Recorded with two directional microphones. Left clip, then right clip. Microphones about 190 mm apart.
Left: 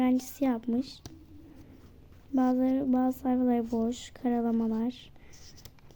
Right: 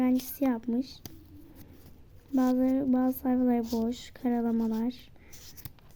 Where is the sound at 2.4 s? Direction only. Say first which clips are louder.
Even; 5° right (ahead or behind).